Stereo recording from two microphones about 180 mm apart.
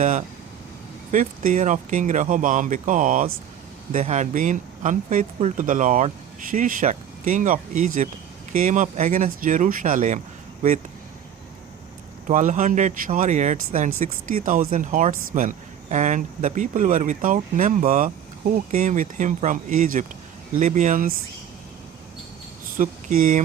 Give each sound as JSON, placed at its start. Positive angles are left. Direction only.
{"t": 0.0, "sound": "speech", "side_deg": -45}
{"t": 12.3, "sound": "speech", "side_deg": -45}
{"t": 22.8, "sound": "speech", "side_deg": -50}